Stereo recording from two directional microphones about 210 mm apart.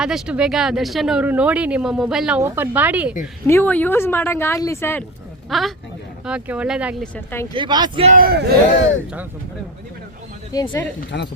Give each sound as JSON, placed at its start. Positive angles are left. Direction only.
{"t": 0.0, "sound": "speech", "side_deg": -5}
{"t": 3.4, "sound": "speech", "side_deg": 10}
{"t": 5.5, "sound": "a man's voice", "side_deg": 0}
{"t": 7.5, "sound": "speech", "side_deg": -20}
{"t": 8.1, "sound": "speech", "side_deg": -45}
{"t": 10.5, "sound": "speech", "side_deg": 15}